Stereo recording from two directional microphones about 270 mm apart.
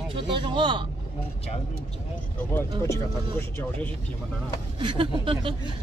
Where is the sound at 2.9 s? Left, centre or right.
Centre.